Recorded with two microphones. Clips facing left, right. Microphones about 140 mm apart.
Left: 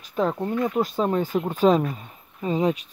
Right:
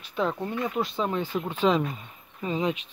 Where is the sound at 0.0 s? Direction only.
40° left (ahead or behind).